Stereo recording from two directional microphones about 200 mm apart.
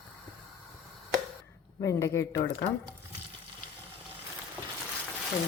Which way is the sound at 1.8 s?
15° left (ahead or behind).